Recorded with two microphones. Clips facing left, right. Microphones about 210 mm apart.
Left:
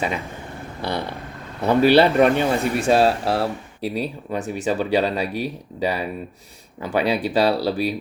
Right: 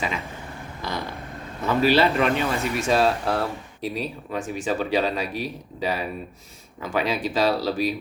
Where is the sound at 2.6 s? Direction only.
35° left (ahead or behind).